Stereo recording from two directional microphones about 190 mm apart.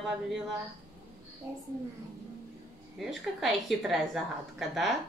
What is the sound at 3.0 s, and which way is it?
A woman's voice, centre (ahead or behind).